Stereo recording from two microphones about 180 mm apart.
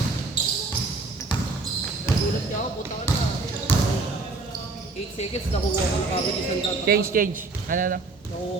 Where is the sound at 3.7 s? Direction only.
10° left (ahead or behind).